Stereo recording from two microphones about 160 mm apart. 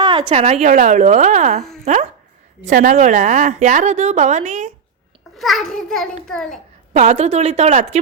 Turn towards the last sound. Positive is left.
turn(degrees=-40)  # may be behind; listen again after turning